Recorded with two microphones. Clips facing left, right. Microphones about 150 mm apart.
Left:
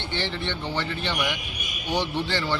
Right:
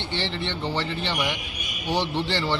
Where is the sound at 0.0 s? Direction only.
Centre (ahead or behind).